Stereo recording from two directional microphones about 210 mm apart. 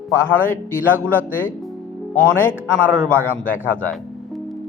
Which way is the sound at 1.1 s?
10° left (ahead or behind).